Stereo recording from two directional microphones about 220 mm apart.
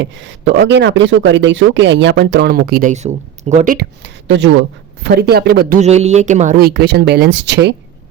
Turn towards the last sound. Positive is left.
turn(degrees=-50)  # may be behind; listen again after turning